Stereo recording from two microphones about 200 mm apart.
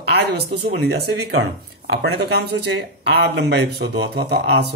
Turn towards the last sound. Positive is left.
turn(degrees=-60)  # may be behind; listen again after turning